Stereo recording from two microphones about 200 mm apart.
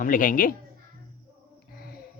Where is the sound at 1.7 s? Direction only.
50° left (ahead or behind).